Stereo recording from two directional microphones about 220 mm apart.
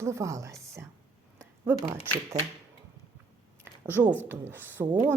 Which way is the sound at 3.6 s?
10° right (ahead or behind).